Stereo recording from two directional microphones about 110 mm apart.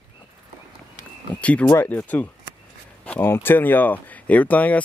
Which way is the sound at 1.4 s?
10° left (ahead or behind).